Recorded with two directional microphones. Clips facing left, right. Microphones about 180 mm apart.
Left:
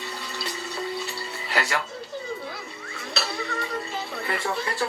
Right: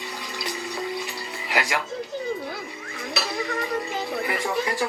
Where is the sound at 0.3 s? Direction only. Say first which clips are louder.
Right 2 dB; 15° right (ahead or behind).